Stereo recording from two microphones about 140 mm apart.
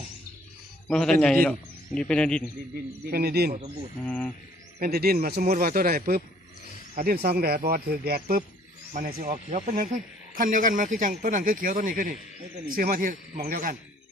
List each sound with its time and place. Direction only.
0.9 s a man's voice: 5° left (ahead or behind)
3.1 s speech: 90° right
4.0 s speech: 10° left (ahead or behind)
4.8 s speech: 90° right